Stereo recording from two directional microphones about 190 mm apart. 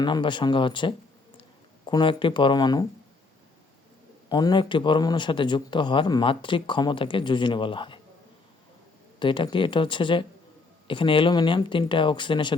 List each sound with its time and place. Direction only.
0.0 s a man's voice: 25° left (ahead or behind)
4.3 s a man's voice: 20° left (ahead or behind)
9.1 s a man's voice: 25° left (ahead or behind)